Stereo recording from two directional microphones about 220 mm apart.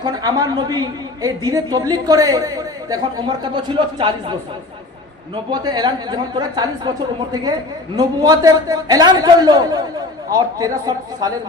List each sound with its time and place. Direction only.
0.0 s a woman's voice: 15° right (ahead or behind)
5.5 s a woman's voice: 20° right (ahead or behind)
7.9 s a woman's voice: 15° right (ahead or behind)